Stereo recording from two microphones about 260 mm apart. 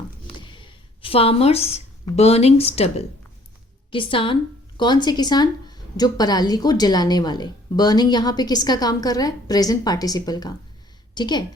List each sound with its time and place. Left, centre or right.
0.3 s a woman's voice: centre